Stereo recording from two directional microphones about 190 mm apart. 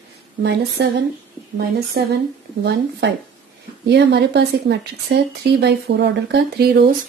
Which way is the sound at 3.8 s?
60° right (ahead or behind).